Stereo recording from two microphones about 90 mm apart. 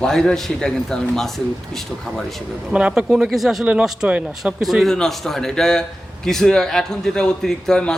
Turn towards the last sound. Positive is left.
turn(degrees=10)  # may be behind; listen again after turning